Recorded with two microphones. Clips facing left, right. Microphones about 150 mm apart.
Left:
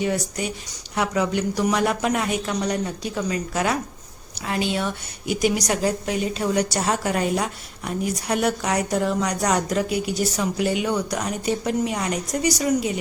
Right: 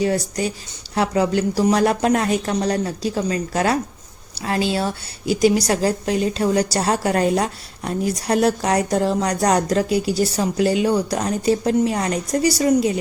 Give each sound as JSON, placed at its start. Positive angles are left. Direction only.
{"t": 0.0, "sound": "a woman's voice", "side_deg": -35}